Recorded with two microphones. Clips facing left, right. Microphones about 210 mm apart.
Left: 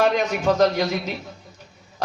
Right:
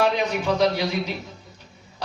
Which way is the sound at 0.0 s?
45° left (ahead or behind).